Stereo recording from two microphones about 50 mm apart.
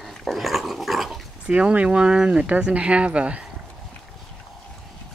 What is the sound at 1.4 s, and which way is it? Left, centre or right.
Speech, right.